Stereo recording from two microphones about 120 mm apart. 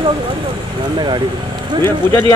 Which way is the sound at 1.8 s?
20° left (ahead or behind).